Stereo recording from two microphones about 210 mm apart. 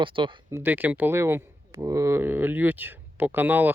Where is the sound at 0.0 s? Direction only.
25° right (ahead or behind).